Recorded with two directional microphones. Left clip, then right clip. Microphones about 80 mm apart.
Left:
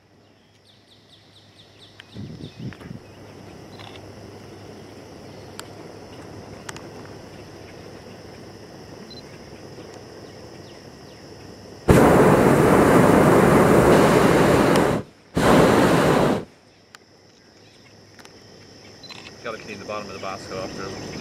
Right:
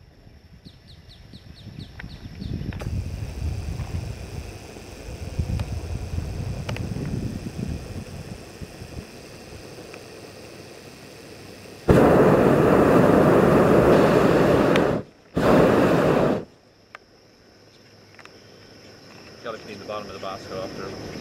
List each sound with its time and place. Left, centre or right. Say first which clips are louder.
11.8 s a sound: left 1 dB; left
19.4 s cricket: left 1 dB; left
20.2 s speech: left 1 dB; left